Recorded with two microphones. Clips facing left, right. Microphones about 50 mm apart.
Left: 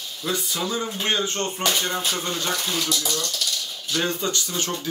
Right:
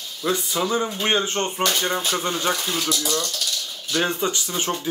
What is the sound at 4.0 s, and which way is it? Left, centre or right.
Speech, right.